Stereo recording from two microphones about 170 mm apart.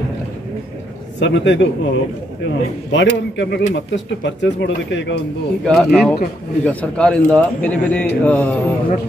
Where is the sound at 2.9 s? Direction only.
90° left.